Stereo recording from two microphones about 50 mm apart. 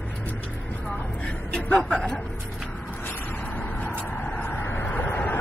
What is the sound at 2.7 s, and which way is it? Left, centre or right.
Vehicle, left.